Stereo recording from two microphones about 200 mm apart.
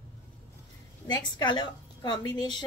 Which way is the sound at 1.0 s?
20° left (ahead or behind).